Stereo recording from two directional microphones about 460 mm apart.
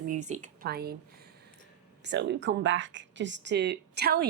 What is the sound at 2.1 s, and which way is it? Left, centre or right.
Speech, right.